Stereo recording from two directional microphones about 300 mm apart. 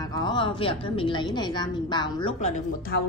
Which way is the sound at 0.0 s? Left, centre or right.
Centre.